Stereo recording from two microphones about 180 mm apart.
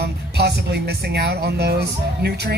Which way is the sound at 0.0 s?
65° right (ahead or behind).